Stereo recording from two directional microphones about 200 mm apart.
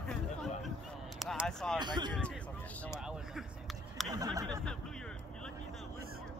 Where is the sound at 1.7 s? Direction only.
20° right (ahead or behind).